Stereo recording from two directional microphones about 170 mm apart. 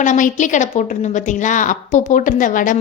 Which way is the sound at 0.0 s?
50° left (ahead or behind).